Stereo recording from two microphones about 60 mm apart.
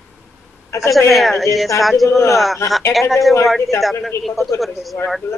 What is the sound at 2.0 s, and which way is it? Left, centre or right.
Speech, left.